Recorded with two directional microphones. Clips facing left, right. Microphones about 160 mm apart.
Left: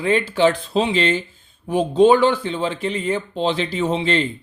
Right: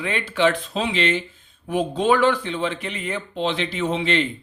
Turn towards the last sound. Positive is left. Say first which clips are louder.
# left 2 dB
turn(degrees=35)  # may be behind; listen again after turning